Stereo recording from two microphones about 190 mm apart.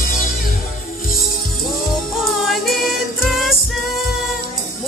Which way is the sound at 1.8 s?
Centre (ahead or behind).